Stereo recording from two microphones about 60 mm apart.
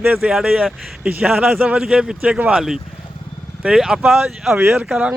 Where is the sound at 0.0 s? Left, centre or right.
Right.